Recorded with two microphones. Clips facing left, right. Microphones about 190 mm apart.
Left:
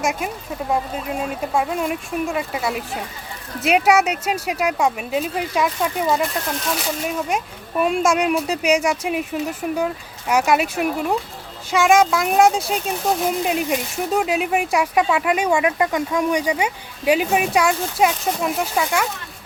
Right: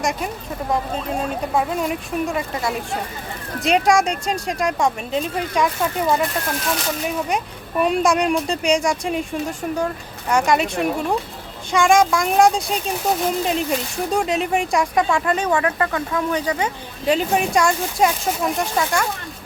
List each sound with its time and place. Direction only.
0.0 s speech: 5° left (ahead or behind)
1.5 s speech: centre (ahead or behind)
7.3 s speech: centre (ahead or behind)